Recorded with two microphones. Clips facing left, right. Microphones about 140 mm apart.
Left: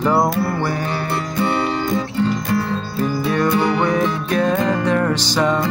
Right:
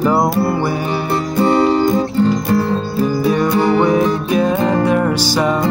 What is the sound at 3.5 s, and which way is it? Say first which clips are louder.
Music: right 4 dB; 40° right (ahead or behind).